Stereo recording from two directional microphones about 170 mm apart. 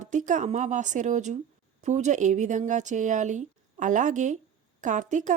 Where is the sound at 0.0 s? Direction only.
50° right (ahead or behind).